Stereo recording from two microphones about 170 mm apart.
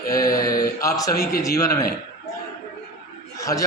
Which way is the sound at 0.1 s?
20° left (ahead or behind).